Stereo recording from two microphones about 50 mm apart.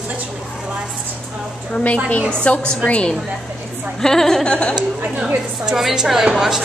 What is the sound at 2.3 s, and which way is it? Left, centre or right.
Speech, left.